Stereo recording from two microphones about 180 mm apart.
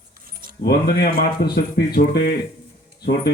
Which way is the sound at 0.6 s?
60° left (ahead or behind).